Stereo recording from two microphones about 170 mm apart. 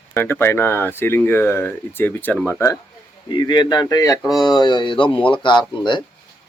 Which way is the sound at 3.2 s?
25° left (ahead or behind).